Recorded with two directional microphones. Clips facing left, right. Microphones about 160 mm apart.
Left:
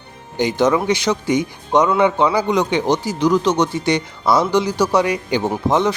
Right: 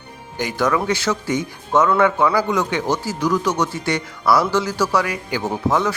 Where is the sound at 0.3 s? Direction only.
20° left (ahead or behind).